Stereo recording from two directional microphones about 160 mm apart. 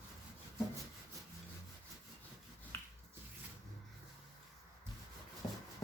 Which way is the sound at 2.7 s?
15° left (ahead or behind).